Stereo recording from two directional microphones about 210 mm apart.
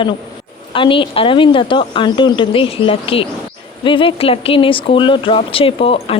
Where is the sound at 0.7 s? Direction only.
25° left (ahead or behind).